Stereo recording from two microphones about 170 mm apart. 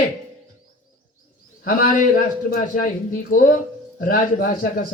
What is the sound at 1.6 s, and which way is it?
A man's voice, 55° left (ahead or behind).